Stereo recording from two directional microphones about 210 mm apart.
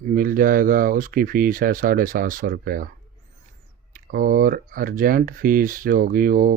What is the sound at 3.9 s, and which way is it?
Speech, 40° right (ahead or behind).